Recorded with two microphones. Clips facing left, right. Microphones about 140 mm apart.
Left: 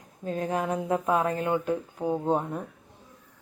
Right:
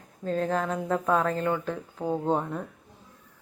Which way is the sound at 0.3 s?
15° left (ahead or behind).